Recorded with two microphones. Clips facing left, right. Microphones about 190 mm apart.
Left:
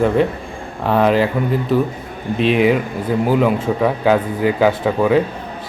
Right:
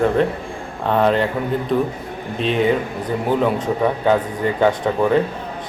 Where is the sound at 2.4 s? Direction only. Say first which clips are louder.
Left 4 dB; 90° left.